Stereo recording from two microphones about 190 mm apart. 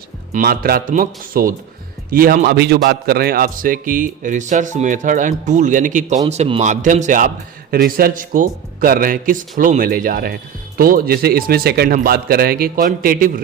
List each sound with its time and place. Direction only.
0.3 s a man's voice: 50° right (ahead or behind)